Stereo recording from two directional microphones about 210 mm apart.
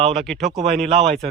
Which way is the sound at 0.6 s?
30° right (ahead or behind).